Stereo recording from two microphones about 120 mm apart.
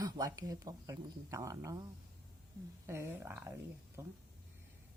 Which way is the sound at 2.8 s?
20° right (ahead or behind).